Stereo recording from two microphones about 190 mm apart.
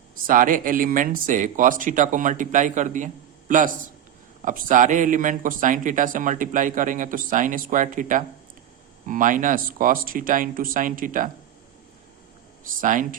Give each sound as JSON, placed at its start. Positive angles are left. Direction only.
{"t": 0.3, "sound": "a man's voice", "side_deg": -45}
{"t": 12.6, "sound": "speech", "side_deg": -45}